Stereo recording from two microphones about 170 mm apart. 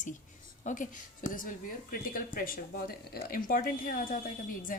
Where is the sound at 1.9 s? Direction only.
55° left (ahead or behind).